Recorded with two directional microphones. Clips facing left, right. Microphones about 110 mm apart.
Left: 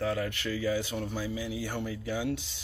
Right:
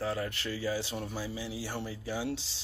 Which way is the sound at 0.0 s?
30° right (ahead or behind).